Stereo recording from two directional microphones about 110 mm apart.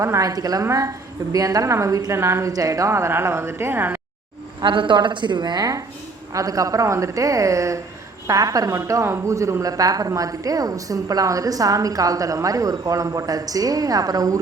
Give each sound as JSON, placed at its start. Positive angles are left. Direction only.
{"t": 0.0, "sound": "a woman's voice", "side_deg": -30}
{"t": 4.6, "sound": "a woman's voice", "side_deg": -45}